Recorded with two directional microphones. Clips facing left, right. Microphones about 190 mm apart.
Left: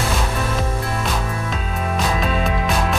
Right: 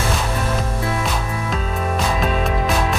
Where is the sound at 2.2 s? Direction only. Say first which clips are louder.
Right 1 dB; centre (ahead or behind).